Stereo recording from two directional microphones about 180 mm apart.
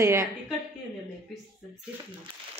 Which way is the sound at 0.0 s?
15° right (ahead or behind).